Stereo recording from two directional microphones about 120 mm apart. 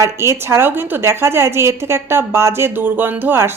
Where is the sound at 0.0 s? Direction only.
20° right (ahead or behind).